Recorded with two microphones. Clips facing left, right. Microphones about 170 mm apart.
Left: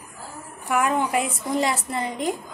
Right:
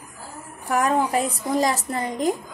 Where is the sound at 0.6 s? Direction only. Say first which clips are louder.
Right 1 dB; 35° right (ahead or behind).